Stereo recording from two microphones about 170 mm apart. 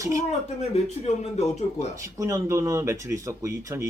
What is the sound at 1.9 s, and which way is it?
Speech, 15° right (ahead or behind).